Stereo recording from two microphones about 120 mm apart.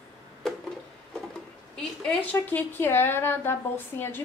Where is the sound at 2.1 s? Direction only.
15° left (ahead or behind).